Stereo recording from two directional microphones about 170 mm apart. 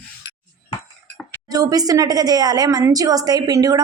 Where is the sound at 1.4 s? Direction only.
20° right (ahead or behind).